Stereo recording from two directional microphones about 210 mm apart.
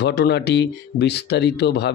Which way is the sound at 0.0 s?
50° left (ahead or behind).